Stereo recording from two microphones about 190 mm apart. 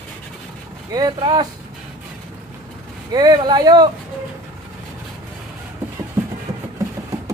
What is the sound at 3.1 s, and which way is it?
Speech, 20° right (ahead or behind).